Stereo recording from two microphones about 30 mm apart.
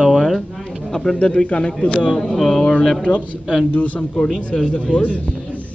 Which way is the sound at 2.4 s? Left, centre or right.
Centre.